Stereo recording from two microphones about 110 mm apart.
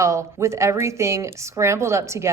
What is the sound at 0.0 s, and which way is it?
A woman's voice, 25° right (ahead or behind).